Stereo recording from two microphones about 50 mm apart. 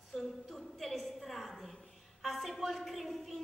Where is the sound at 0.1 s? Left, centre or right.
Centre.